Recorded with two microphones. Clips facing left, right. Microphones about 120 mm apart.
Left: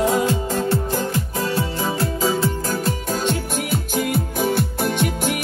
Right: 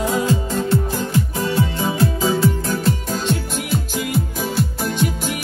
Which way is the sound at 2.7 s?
45° left (ahead or behind).